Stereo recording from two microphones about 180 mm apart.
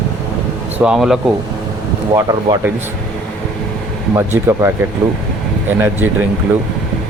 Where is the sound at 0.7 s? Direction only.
5° right (ahead or behind).